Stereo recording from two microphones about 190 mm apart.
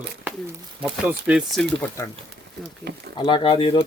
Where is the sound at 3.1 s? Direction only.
25° left (ahead or behind).